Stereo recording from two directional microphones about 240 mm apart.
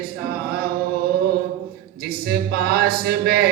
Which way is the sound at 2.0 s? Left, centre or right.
Right.